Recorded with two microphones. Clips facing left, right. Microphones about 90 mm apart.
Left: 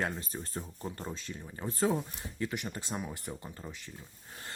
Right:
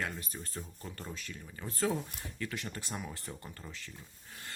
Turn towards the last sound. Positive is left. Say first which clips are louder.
# left 4 dB
turn(degrees=20)  # may be behind; listen again after turning